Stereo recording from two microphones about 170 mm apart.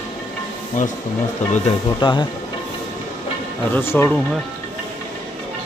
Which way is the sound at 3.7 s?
15° left (ahead or behind).